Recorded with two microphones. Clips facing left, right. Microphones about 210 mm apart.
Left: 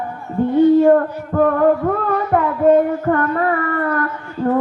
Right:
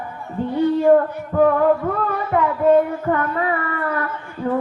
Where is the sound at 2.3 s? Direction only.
50° left (ahead or behind).